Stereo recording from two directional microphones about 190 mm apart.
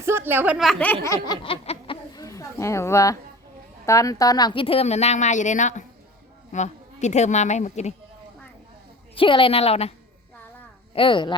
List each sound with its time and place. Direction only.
0.0 s speech: 15° right (ahead or behind); by 0.9 s 5° left (ahead or behind)
1.0 s laughter: 25° left (ahead or behind)
2.1 s a sound: 15° left (ahead or behind)
3.8 s speech: 15° left (ahead or behind); by 7.9 s 35° left (ahead or behind)
9.1 s a woman's voice: 25° left (ahead or behind)
10.9 s a woman's voice: 25° left (ahead or behind)